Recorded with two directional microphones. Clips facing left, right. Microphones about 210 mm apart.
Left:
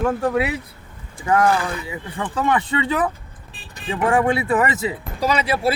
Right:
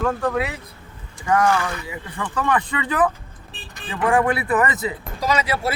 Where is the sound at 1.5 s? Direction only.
35° left (ahead or behind).